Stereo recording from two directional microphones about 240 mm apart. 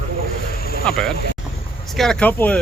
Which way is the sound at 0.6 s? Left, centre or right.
Left.